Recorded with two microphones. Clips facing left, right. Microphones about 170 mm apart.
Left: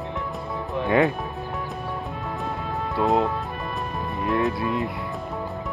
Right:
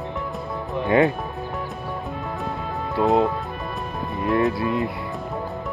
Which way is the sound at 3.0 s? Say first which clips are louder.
Right 3 dB; centre (ahead or behind).